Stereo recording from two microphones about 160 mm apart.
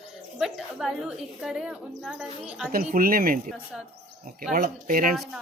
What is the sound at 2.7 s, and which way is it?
Speech, 65° right (ahead or behind).